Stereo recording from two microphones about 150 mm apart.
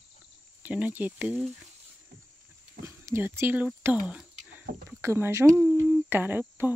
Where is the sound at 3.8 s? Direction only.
10° right (ahead or behind).